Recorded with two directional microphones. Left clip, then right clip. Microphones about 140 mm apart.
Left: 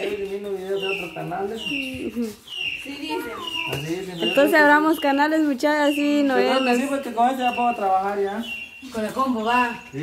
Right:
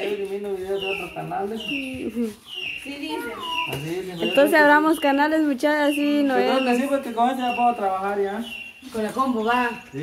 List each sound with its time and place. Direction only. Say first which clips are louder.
4.2 s speech: even; centre (ahead or behind)
6.7 s speech: even; 20° left (ahead or behind)
9.0 s speech: even; centre (ahead or behind)